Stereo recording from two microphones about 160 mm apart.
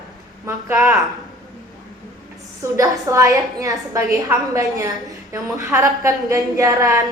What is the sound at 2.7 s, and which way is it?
A woman's voice, 20° right (ahead or behind).